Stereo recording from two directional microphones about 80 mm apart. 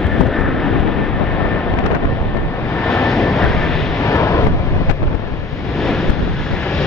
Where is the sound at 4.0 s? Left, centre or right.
Left.